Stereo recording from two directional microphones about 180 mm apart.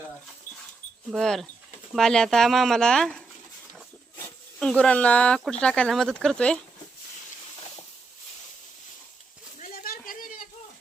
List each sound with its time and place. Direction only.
1.1 s speech: centre (ahead or behind)
4.6 s speech: 5° left (ahead or behind)
9.6 s a sound: 45° left (ahead or behind)